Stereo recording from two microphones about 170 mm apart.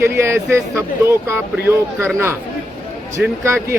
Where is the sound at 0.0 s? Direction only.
15° right (ahead or behind).